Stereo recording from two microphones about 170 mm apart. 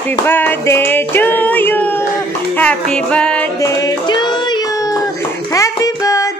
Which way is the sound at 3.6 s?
20° left (ahead or behind).